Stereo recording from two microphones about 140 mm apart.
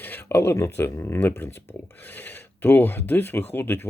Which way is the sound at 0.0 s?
15° left (ahead or behind).